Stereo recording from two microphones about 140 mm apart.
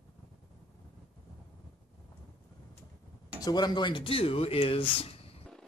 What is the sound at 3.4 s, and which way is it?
Speech, 30° left (ahead or behind).